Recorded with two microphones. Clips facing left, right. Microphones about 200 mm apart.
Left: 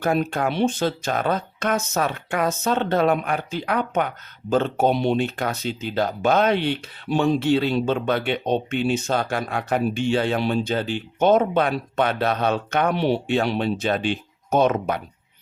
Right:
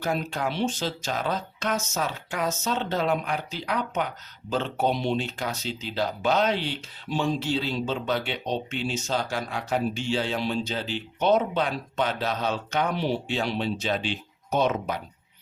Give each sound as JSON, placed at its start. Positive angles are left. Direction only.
{"t": 0.0, "sound": "speech", "side_deg": 55}